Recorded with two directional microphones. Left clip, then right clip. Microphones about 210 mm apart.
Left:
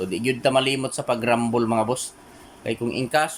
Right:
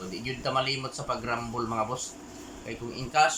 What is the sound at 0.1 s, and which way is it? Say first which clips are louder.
Speech: left 9 dB; 45° left (ahead or behind).